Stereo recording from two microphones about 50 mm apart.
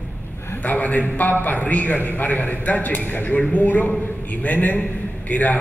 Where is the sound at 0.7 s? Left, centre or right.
Left.